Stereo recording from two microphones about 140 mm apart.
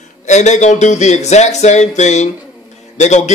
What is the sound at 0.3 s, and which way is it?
A man's voice, 55° left (ahead or behind).